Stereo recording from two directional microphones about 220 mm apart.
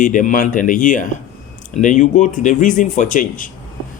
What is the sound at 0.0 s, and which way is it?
Speech, 35° left (ahead or behind).